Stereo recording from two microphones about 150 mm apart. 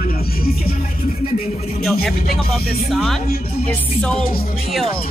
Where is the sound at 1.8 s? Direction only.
Centre (ahead or behind).